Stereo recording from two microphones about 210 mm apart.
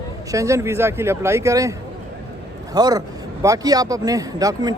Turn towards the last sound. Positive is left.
turn(degrees=-15)  # may be behind; listen again after turning